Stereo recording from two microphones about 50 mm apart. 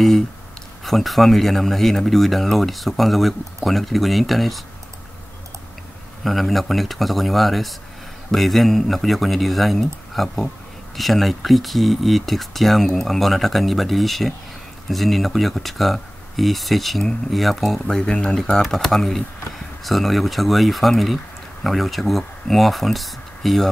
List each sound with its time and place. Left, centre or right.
0.8 s speech: centre
6.2 s speech: centre
17.7 s speech: centre
18.6 s speech: centre